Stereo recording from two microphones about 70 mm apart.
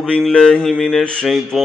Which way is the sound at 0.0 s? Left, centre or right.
Centre.